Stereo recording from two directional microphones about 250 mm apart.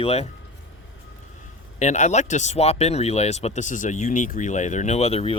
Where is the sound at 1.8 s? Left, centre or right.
Left.